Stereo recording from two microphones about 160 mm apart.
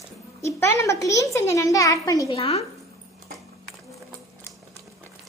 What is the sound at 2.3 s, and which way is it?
Speech, 35° left (ahead or behind).